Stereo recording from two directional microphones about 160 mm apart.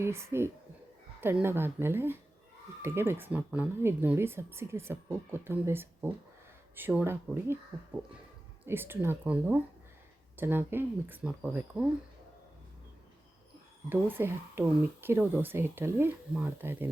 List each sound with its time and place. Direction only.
0.0 s speech: 15° right (ahead or behind)
8.6 s speech: 15° right (ahead or behind)
13.9 s speech: 15° right (ahead or behind)